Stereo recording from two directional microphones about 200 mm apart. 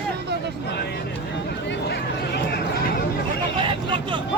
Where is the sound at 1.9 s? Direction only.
55° left (ahead or behind).